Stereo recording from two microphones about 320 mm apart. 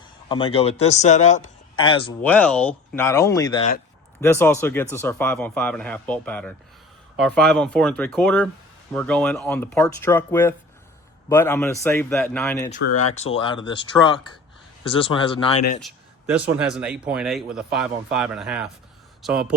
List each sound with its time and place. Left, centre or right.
0.0 s a man's voice: centre
2.3 s a man's voice: centre
15.8 s a man's voice: centre